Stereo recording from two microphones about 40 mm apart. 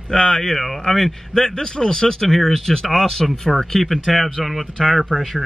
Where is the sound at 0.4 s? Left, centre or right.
Centre.